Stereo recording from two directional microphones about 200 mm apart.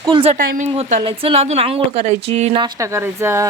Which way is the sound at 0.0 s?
25° right (ahead or behind).